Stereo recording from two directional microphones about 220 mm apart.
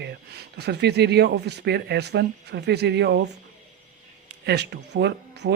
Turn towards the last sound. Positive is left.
turn(degrees=-50)  # may be behind; listen again after turning